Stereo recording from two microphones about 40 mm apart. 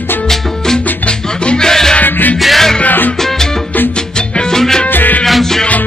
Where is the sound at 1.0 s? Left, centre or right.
Left.